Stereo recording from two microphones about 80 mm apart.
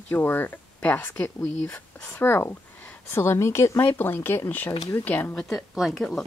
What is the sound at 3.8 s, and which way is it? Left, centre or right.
Speech, left.